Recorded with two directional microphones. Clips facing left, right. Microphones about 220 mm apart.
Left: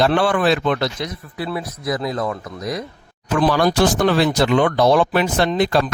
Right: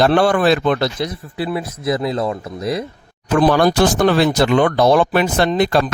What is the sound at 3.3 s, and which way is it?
Speech, 50° right (ahead or behind).